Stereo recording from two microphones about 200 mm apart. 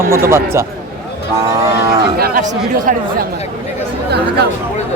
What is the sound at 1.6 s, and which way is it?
Cattle, 15° right (ahead or behind).